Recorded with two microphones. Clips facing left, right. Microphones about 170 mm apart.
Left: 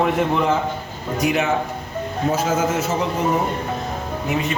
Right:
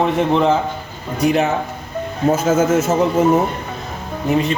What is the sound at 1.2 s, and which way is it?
Speech, 35° right (ahead or behind).